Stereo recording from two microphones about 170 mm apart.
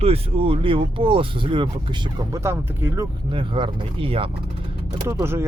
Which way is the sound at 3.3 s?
30° right (ahead or behind).